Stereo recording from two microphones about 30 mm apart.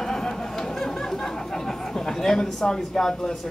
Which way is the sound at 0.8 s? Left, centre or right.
Centre.